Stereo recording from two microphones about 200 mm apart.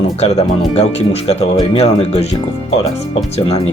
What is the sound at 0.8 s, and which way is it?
Speech, 30° left (ahead or behind).